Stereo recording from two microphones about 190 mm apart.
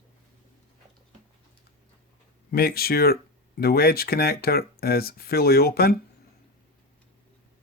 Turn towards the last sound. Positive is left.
turn(degrees=55)  # may be behind; listen again after turning